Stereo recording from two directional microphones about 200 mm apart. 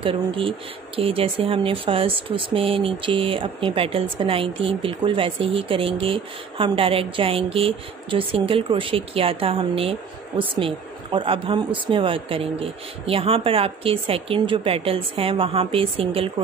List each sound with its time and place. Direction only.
0.0 s speech: 25° right (ahead or behind)